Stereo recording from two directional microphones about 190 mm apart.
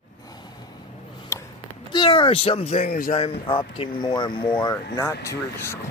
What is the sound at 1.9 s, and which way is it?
Speech, 25° left (ahead or behind).